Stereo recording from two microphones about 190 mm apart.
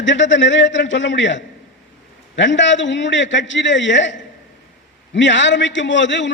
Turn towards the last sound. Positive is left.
turn(degrees=70)  # may be behind; listen again after turning